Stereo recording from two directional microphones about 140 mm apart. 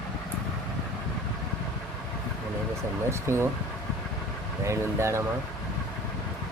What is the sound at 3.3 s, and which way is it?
Speech, 20° right (ahead or behind).